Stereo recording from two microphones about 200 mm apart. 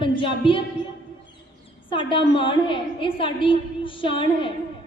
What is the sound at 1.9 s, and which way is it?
A woman's voice, 25° left (ahead or behind).